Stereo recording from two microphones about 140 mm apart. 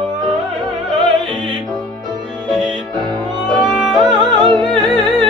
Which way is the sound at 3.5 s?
Centre (ahead or behind).